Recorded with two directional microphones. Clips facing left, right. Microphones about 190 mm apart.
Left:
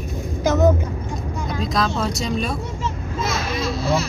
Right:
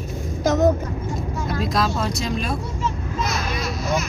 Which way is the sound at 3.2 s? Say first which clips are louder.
Left 2 dB; 25° left (ahead or behind).